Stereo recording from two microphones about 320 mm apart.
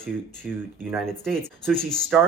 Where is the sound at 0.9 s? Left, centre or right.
Centre.